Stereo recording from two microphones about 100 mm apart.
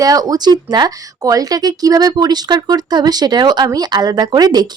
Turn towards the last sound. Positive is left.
turn(degrees=-45)  # may be behind; listen again after turning